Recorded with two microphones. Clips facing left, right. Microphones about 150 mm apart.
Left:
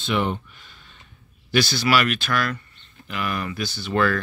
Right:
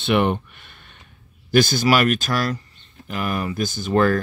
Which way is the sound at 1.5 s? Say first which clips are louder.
Right 4 dB; 45° right (ahead or behind).